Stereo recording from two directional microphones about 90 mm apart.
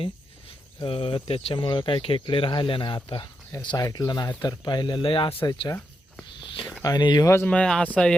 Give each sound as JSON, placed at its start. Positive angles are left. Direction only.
{"t": 0.9, "sound": "speech", "side_deg": 90}
{"t": 3.8, "sound": "speech", "side_deg": 45}
{"t": 6.4, "sound": "a sound", "side_deg": 70}
{"t": 6.8, "sound": "speech", "side_deg": 50}
{"t": 7.4, "sound": "speech", "side_deg": 10}